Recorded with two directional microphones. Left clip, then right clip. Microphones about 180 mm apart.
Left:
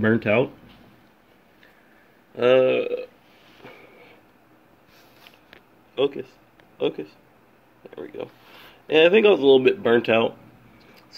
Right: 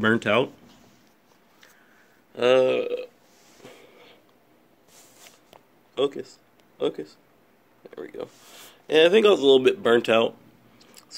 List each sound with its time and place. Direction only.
0.0 s speech: 5° right (ahead or behind)
2.3 s speech: 5° left (ahead or behind)
5.9 s speech: 5° right (ahead or behind)
7.8 s a sound: 5° right (ahead or behind)
8.2 s speech: 5° right (ahead or behind)
10.8 s vehicle: 5° right (ahead or behind)